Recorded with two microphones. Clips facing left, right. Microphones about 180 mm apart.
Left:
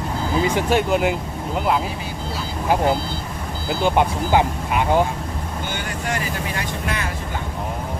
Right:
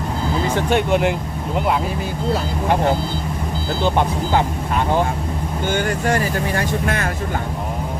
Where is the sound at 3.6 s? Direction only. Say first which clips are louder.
Left 1 dB; 10° left (ahead or behind).